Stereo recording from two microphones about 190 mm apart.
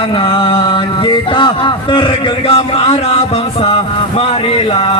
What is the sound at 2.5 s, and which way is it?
Music, 30° left (ahead or behind).